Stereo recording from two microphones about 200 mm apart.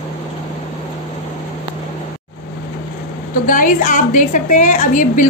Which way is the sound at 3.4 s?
40° left (ahead or behind).